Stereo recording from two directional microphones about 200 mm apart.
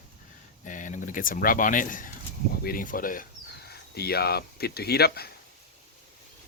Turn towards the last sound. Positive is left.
turn(degrees=50)  # may be behind; listen again after turning